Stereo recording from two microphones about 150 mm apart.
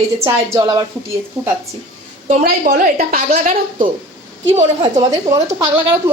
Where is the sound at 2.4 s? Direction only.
80° right.